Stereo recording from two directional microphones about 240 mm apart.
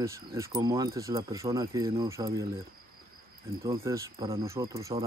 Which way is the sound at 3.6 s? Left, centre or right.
Centre.